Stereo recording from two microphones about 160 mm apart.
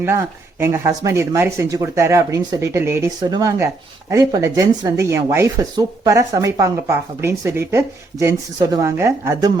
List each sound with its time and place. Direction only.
0.0 s speech: 15° right (ahead or behind)